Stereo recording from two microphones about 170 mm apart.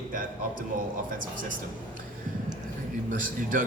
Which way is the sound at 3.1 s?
55° right (ahead or behind).